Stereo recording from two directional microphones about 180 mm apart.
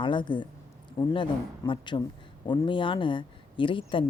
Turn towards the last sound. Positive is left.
turn(degrees=30)  # may be behind; listen again after turning